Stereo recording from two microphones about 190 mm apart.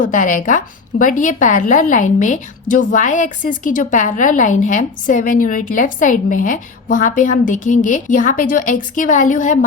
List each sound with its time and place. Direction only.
0.0 s a woman's voice: 45° left (ahead or behind)